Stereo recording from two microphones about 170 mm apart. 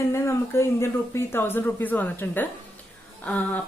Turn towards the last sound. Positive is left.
turn(degrees=10)  # may be behind; listen again after turning